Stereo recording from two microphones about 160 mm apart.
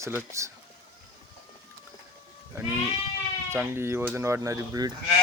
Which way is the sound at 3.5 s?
15° right (ahead or behind).